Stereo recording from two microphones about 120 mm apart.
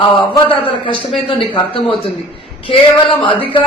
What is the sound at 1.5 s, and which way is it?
A man's voice, 50° left (ahead or behind).